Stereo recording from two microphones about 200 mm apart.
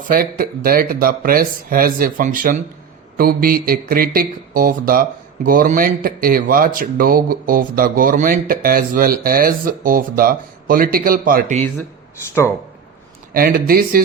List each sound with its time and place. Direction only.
0.1 s speech: 45° right (ahead or behind)
13.3 s speech: 45° right (ahead or behind)